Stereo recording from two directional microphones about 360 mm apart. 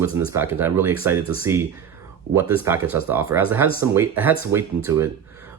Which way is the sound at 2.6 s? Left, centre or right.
Centre.